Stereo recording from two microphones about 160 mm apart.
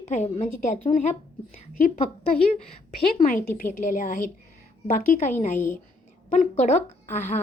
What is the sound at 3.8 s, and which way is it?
A woman's voice, 55° left (ahead or behind).